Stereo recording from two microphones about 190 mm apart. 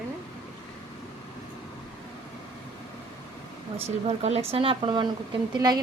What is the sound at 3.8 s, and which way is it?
Speech, 35° right (ahead or behind).